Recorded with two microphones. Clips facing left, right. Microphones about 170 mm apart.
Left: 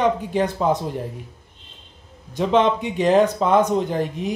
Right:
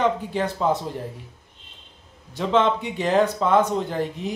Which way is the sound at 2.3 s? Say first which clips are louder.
Left 2 dB; 15° left (ahead or behind).